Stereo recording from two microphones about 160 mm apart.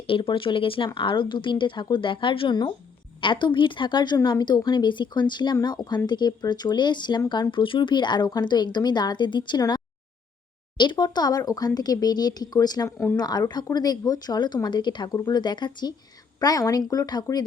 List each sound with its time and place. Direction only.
0.1 s a woman's voice: 30° left (ahead or behind)